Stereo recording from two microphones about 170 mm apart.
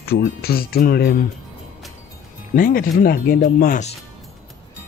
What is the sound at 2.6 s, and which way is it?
Speech, 55° left (ahead or behind).